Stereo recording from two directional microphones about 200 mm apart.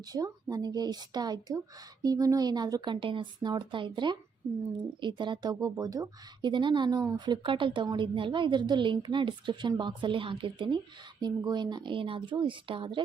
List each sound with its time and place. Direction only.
0.1 s speech: 20° right (ahead or behind)